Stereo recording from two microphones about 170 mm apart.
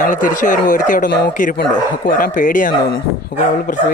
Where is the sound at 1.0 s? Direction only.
80° left.